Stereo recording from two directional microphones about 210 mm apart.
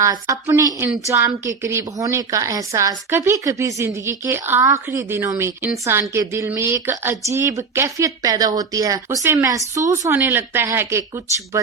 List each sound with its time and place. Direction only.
0.0 s a woman's voice: 15° right (ahead or behind)